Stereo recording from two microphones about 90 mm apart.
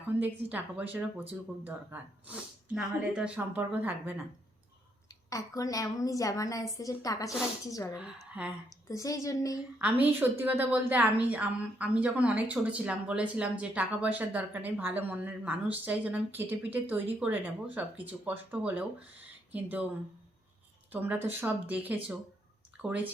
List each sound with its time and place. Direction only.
0.2 s a woman's voice: 20° right (ahead or behind)
5.3 s a woman's voice: 40° left (ahead or behind)
7.9 s a woman's voice: 10° right (ahead or behind)
8.9 s a woman's voice: 35° left (ahead or behind)
9.7 s a woman's voice: 15° right (ahead or behind)
20.9 s a woman's voice: 20° right (ahead or behind)